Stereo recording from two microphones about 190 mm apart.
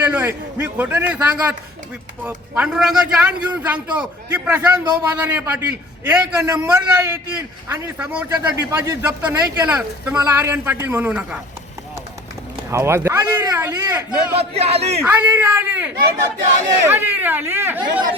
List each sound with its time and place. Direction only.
0.0 s a man's voice: 10° right (ahead or behind)
12.7 s a man's voice: 15° right (ahead or behind)
14.3 s a man's voice: 30° right (ahead or behind)
15.0 s a man's voice: 10° right (ahead or behind)